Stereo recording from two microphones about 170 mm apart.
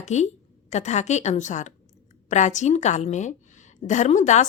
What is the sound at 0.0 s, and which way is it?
A woman's voice, 45° left (ahead or behind).